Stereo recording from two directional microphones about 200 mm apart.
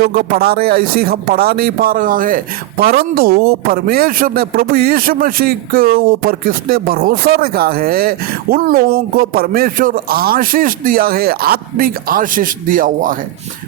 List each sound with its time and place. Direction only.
0.0 s speech: 50° right (ahead or behind)